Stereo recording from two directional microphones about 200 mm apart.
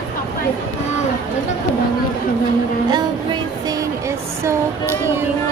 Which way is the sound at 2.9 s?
20° right (ahead or behind).